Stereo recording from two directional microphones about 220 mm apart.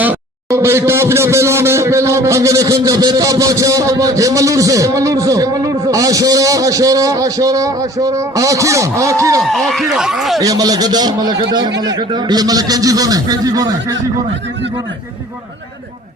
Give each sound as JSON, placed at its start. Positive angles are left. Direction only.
{"t": 0.0, "sound": "speech", "side_deg": -10}
{"t": 9.4, "sound": "speech", "side_deg": 0}
{"t": 10.4, "sound": "speech", "side_deg": -15}